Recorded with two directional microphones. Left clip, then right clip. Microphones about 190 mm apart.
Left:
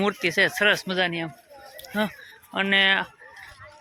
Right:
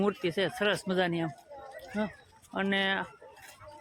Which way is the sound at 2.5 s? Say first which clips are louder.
Left 9 dB; 5° left (ahead or behind).